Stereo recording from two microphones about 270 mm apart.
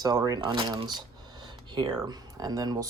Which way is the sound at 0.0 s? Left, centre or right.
Centre.